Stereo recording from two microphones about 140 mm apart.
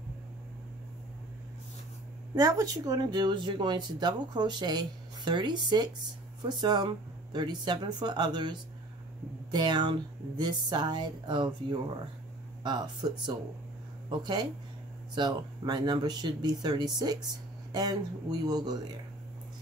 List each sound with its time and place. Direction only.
2.3 s speech: 25° right (ahead or behind)